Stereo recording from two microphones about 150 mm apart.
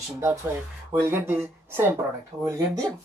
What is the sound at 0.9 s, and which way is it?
A woman's voice, 15° right (ahead or behind).